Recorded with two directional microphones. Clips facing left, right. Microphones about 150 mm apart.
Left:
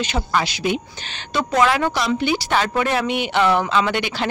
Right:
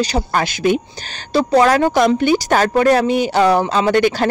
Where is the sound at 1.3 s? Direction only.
35° right (ahead or behind).